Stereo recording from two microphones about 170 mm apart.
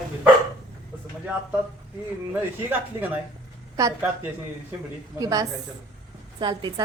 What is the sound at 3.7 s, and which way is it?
Speech, 20° right (ahead or behind).